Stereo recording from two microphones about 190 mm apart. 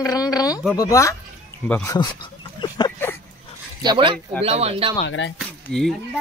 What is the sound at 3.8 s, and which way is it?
Speech, 25° right (ahead or behind).